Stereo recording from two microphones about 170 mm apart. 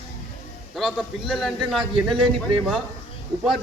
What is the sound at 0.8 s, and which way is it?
A man's voice, centre (ahead or behind).